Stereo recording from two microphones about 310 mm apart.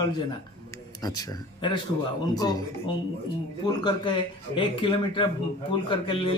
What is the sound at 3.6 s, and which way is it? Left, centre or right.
A man's voice, centre.